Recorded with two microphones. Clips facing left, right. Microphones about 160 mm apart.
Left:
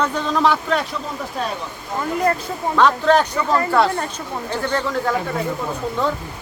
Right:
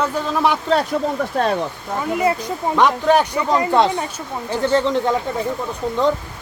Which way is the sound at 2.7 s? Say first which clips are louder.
Even; 15° right (ahead or behind).